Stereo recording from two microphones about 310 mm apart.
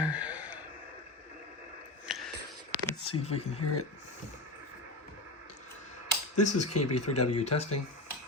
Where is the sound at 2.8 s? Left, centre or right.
Centre.